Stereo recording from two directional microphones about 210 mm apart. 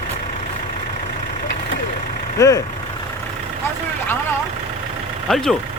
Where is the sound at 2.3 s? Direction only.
15° left (ahead or behind).